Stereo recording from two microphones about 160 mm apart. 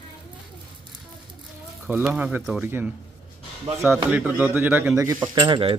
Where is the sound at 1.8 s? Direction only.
10° right (ahead or behind).